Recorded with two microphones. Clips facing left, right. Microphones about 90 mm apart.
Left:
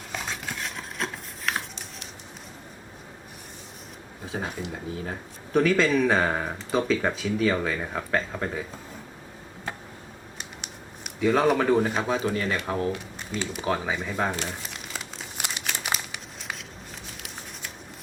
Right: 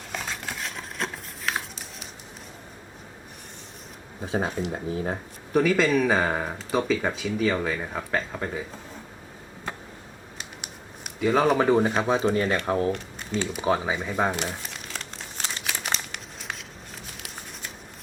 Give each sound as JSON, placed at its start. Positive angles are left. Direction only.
{"t": 0.1, "sound": "a sound", "side_deg": 0}
{"t": 4.4, "sound": "speech", "side_deg": -35}
{"t": 5.5, "sound": "speech", "side_deg": -5}
{"t": 11.0, "sound": "speech", "side_deg": -5}
{"t": 12.0, "sound": "speech", "side_deg": -30}
{"t": 12.9, "sound": "speech", "side_deg": 5}
{"t": 13.6, "sound": "speech", "side_deg": -10}
{"t": 14.3, "sound": "crumpling", "side_deg": -5}
{"t": 17.1, "sound": "a sound", "side_deg": 0}